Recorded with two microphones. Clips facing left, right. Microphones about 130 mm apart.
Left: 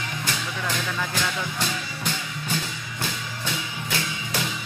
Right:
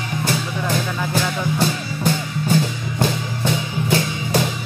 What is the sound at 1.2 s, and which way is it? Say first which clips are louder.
Music: right 7 dB; 35° right (ahead or behind).